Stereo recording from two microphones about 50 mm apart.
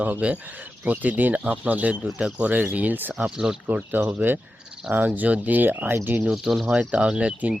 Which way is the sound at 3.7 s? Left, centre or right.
Right.